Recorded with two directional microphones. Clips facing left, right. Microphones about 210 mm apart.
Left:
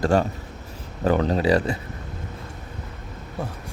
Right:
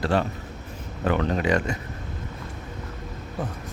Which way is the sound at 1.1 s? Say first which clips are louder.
Left 3 dB; 35° left (ahead or behind).